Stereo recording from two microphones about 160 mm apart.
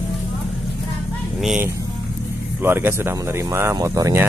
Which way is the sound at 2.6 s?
15° right (ahead or behind).